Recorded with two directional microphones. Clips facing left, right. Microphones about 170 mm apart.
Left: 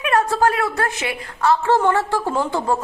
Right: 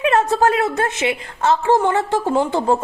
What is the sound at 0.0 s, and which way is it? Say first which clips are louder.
A woman's voice: right 2 dB; 25° right (ahead or behind).